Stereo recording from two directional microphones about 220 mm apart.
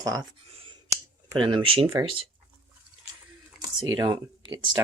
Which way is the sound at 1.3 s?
20° right (ahead or behind).